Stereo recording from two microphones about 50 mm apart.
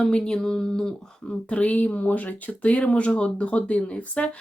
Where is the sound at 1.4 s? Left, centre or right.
Left.